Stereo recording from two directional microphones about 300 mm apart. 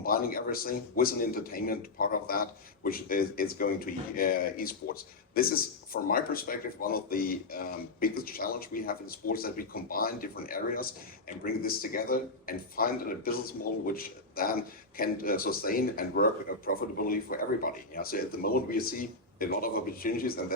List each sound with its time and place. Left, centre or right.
0.0 s speech: left